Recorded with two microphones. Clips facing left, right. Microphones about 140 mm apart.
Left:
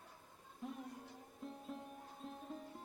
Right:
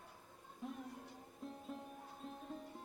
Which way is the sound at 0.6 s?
Centre (ahead or behind).